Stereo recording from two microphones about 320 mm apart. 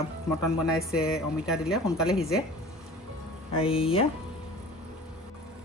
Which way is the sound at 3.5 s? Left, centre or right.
Centre.